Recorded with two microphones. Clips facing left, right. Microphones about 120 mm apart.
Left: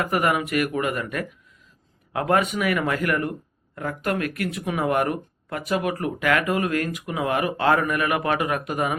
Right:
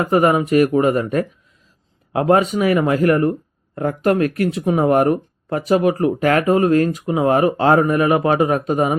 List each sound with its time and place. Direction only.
0.0 s speech: 25° right (ahead or behind)